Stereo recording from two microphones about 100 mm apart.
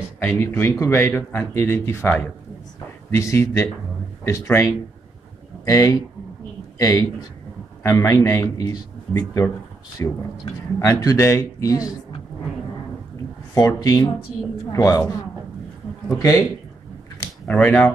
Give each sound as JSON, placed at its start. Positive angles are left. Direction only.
{"t": 0.4, "sound": "speech", "side_deg": 25}
{"t": 13.6, "sound": "speech", "side_deg": 35}
{"t": 16.1, "sound": "speech", "side_deg": 30}
{"t": 17.5, "sound": "speech", "side_deg": 15}